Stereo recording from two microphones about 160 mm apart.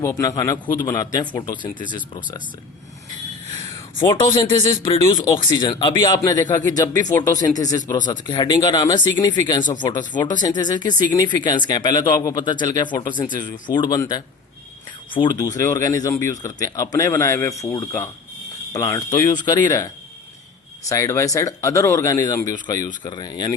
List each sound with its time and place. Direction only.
0.0 s speech: 20° left (ahead or behind)
3.6 s speech: 20° left (ahead or behind)
20.9 s speech: 20° left (ahead or behind)